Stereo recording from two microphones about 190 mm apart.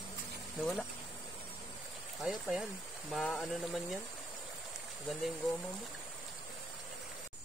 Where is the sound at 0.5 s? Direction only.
Centre (ahead or behind).